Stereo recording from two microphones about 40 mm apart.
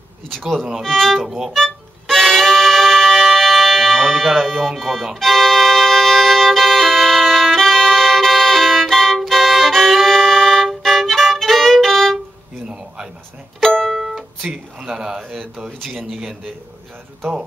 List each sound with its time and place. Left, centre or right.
0.8 s speech: centre
1.2 s speech: centre
1.5 s music: centre
10.8 s violin: centre
12.6 s a sound: right
13.7 s music: centre
13.9 s music: centre
14.5 s speech: centre
15.8 s speech: centre